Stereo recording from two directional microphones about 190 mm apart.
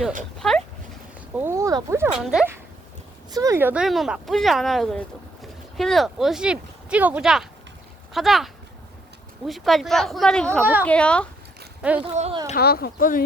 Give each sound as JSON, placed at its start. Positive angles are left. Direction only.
{"t": 0.3, "sound": "speech", "side_deg": 0}
{"t": 1.4, "sound": "speech", "side_deg": -15}
{"t": 2.1, "sound": "speech", "side_deg": -5}
{"t": 3.3, "sound": "speech", "side_deg": -15}
{"t": 9.5, "sound": "speech", "side_deg": 0}
{"t": 10.6, "sound": "a woman's voice", "side_deg": -10}
{"t": 10.8, "sound": "speech", "side_deg": 5}
{"t": 11.8, "sound": "speech", "side_deg": -5}
{"t": 12.1, "sound": "speech", "side_deg": -35}
{"t": 12.5, "sound": "speech", "side_deg": 55}